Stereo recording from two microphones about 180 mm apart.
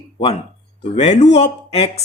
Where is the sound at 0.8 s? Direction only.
40° left (ahead or behind).